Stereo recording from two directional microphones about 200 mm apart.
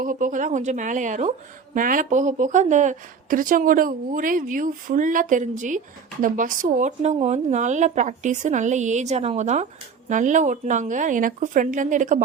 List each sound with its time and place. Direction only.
0.0 s a woman's voice: 40° right (ahead or behind)